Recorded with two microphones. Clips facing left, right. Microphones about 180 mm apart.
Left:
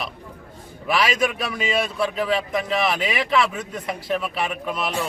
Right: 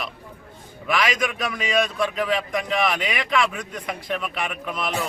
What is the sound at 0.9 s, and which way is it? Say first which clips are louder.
Speech: left 2 dB; 30° left (ahead or behind).